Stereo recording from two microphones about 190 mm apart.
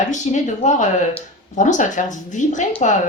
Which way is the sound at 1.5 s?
40° left (ahead or behind).